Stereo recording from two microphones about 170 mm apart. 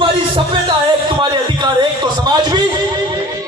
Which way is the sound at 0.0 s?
30° right (ahead or behind).